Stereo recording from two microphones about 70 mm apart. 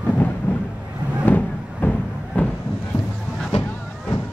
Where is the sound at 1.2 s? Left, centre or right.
Left.